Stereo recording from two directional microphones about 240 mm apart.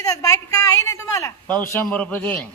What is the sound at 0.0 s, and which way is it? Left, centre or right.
Speech, centre.